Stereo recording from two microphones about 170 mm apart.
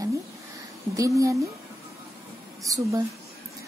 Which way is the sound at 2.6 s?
20° right (ahead or behind).